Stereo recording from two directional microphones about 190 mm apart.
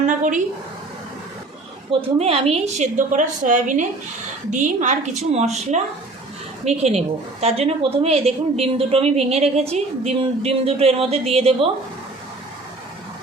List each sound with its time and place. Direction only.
0.0 s a woman's voice: 40° right (ahead or behind)
1.9 s a woman's voice: 30° right (ahead or behind)